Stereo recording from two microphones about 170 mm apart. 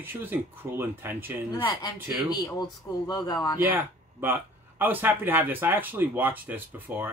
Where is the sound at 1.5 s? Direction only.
30° left (ahead or behind).